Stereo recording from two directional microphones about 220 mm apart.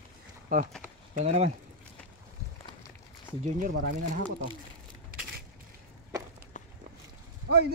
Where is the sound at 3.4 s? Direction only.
35° right (ahead or behind).